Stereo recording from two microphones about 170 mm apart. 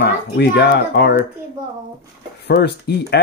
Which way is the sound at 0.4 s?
80° left.